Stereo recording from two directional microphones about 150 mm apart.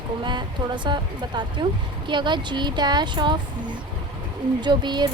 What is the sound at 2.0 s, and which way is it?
Speech, 30° right (ahead or behind).